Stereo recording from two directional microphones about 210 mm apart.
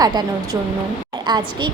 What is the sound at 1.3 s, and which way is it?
Speech, 20° right (ahead or behind).